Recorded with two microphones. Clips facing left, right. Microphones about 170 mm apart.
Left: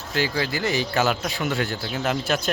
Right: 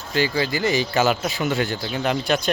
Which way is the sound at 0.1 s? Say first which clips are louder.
Right 3 dB; centre (ahead or behind).